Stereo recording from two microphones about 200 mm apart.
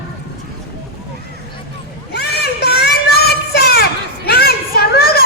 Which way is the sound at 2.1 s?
55° left (ahead or behind).